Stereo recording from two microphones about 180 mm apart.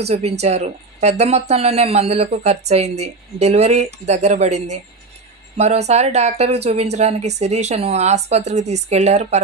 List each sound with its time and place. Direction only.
0.1 s speech: 35° right (ahead or behind)